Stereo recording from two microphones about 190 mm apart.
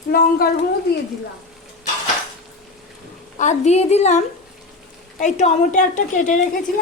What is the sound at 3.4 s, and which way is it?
A woman's voice, 35° left (ahead or behind).